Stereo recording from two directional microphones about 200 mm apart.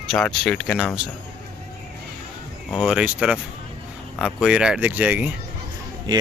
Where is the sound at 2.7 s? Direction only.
5° right (ahead or behind).